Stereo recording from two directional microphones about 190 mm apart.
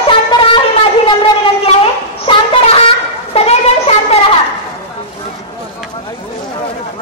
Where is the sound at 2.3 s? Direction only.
30° left (ahead or behind).